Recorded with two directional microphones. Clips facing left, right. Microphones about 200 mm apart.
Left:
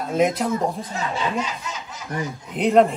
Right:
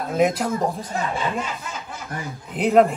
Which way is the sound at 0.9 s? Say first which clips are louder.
Even; 55° right (ahead or behind).